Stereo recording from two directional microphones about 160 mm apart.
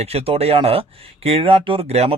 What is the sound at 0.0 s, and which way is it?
Speech, 40° right (ahead or behind).